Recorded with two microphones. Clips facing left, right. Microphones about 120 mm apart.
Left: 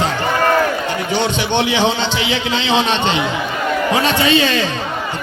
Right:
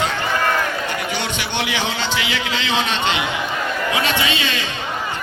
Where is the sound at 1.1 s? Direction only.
30° left (ahead or behind).